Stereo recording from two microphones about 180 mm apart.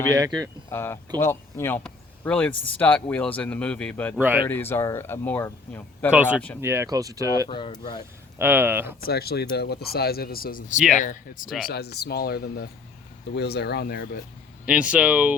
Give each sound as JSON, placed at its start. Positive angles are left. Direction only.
{"t": 0.1, "sound": "speech", "side_deg": -20}
{"t": 0.7, "sound": "speech", "side_deg": 15}
{"t": 4.2, "sound": "speech", "side_deg": -10}
{"t": 4.4, "sound": "speech", "side_deg": 10}
{"t": 6.1, "sound": "speech", "side_deg": -5}
{"t": 7.4, "sound": "speech", "side_deg": 25}
{"t": 8.4, "sound": "speech", "side_deg": -10}
{"t": 9.0, "sound": "speech", "side_deg": 60}
{"t": 11.4, "sound": "speech", "side_deg": 0}
{"t": 11.7, "sound": "speech", "side_deg": 65}
{"t": 14.6, "sound": "speech", "side_deg": -5}